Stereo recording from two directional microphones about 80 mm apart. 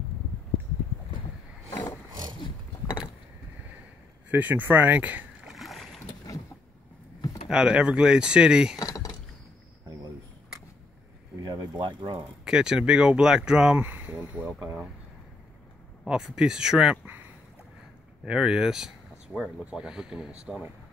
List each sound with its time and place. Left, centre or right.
4.3 s speech: right
5.5 s boat: centre
7.4 s speech: centre
8.7 s a sound: left
11.4 s a sound: right
12.4 s speech: centre
13.7 s speech: right
16.1 s speech: centre
18.2 s speech: centre